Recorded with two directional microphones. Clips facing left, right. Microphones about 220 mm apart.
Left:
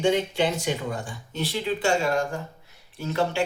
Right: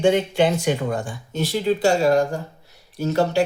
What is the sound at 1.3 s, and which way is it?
Speech, 45° right (ahead or behind).